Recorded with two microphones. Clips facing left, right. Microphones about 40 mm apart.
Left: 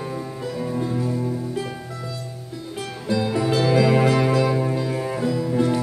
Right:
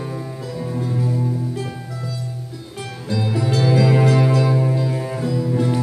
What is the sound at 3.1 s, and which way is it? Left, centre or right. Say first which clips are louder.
Music: left 1 dB; centre.